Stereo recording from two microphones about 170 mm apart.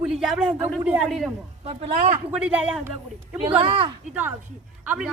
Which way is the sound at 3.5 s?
30° right (ahead or behind).